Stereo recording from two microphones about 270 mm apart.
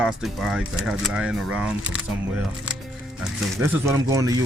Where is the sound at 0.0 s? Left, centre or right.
Centre.